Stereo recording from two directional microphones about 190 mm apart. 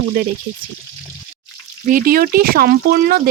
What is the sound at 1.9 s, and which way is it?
Speech, 50° right (ahead or behind).